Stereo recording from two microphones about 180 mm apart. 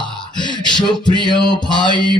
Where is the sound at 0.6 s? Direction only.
25° left (ahead or behind).